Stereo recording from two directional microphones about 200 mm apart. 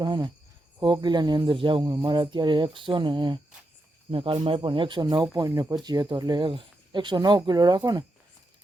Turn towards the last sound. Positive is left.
turn(degrees=-20)  # may be behind; listen again after turning